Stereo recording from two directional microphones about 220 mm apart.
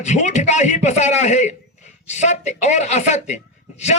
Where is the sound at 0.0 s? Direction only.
30° left (ahead or behind).